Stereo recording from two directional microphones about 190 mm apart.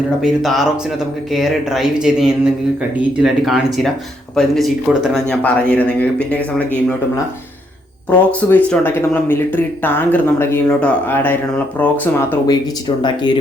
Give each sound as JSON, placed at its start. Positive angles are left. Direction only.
{"t": 0.2, "sound": "speech", "side_deg": 0}
{"t": 8.3, "sound": "speech", "side_deg": 10}
{"t": 13.0, "sound": "speech", "side_deg": 25}